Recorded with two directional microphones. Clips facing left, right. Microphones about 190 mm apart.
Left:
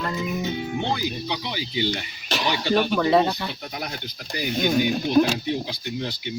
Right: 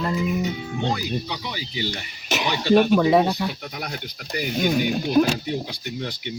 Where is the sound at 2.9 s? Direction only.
10° right (ahead or behind).